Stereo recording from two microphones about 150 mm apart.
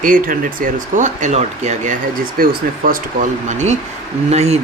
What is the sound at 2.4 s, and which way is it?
Speech, 70° right (ahead or behind).